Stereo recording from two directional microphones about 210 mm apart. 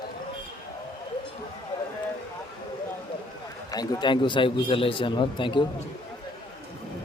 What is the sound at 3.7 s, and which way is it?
A man's voice, 20° left (ahead or behind).